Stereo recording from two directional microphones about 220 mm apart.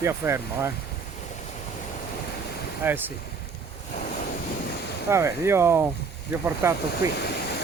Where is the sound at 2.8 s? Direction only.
10° right (ahead or behind).